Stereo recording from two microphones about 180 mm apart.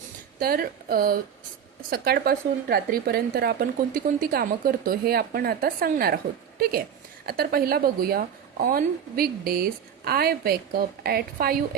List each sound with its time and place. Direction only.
0.3 s a woman's voice: 55° right (ahead or behind)